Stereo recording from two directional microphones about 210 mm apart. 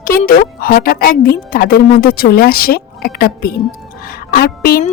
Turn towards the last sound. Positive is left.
turn(degrees=45)  # may be behind; listen again after turning